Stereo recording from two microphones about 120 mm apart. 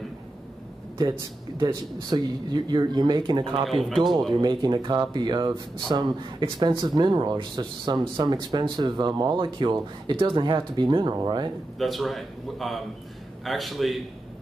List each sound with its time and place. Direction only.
1.6 s speech: 35° right (ahead or behind)
11.8 s a man's voice: centre (ahead or behind)